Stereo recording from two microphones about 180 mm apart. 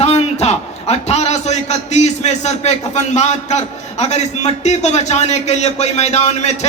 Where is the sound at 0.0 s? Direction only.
35° left (ahead or behind).